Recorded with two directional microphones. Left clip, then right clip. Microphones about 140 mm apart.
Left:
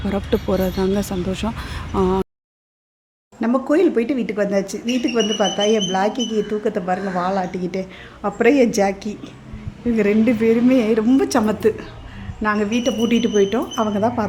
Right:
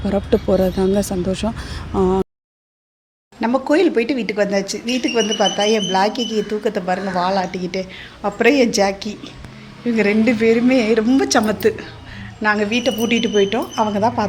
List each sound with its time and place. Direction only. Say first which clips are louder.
0.0 s speech: right 4 dB; 10° right (ahead or behind)
3.4 s a woman's voice: right 1 dB; 20° left (ahead or behind)